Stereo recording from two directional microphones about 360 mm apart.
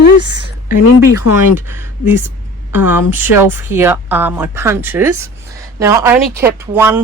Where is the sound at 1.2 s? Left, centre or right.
Left.